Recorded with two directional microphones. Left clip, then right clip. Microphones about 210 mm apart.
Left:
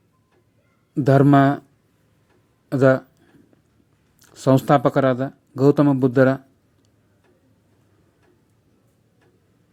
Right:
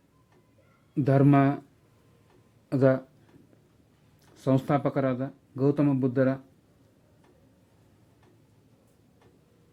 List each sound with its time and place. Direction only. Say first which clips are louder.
1.0 s speech: left 8 dB; 15° left (ahead or behind)
2.6 s speech: left 7 dB; 10° left (ahead or behind)
4.2 s speech: left 9 dB; 20° left (ahead or behind)